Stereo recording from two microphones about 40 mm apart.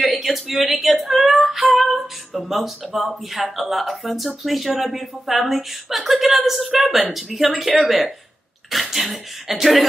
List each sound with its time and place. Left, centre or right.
0.0 s female singing: centre